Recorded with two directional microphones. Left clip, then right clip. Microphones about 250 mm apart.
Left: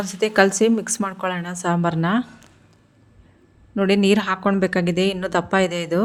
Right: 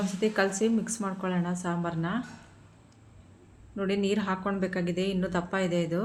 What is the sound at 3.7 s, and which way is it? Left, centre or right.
A woman's voice, left.